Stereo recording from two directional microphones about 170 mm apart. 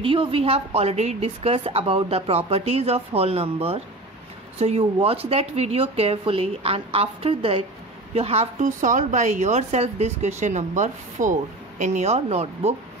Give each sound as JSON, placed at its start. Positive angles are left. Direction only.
{"t": 0.0, "sound": "a woman's voice", "side_deg": -30}